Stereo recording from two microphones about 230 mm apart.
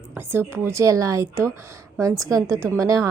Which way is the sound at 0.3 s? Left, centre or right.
Centre.